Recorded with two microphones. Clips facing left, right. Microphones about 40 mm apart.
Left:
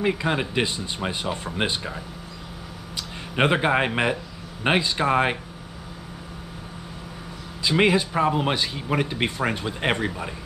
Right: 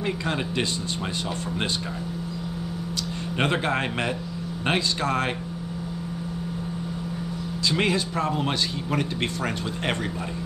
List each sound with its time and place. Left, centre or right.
0.0 s speech: centre
3.3 s speech: centre
7.6 s speech: centre